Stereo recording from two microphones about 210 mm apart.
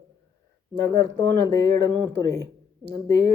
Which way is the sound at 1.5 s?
15° left (ahead or behind).